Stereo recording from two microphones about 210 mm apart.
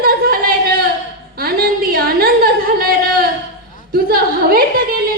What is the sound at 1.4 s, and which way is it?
A woman's voice, 45° right (ahead or behind).